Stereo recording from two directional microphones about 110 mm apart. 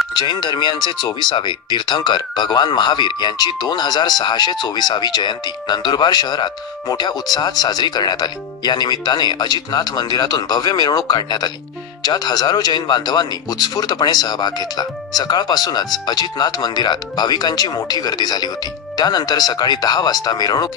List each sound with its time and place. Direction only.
0.1 s speech: 45° left (ahead or behind)